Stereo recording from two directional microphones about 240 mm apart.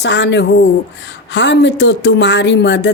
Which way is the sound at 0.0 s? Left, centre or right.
Left.